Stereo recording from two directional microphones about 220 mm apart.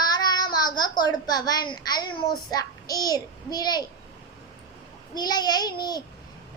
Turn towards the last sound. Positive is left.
turn(degrees=20)  # may be behind; listen again after turning